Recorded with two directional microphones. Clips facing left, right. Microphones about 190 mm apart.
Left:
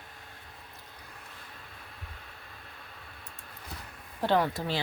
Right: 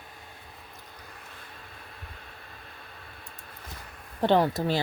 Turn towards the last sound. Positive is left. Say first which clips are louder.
# right 5 dB
turn(degrees=-45)  # may be behind; listen again after turning